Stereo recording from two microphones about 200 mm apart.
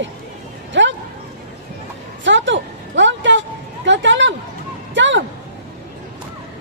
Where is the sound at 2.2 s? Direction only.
65° right (ahead or behind).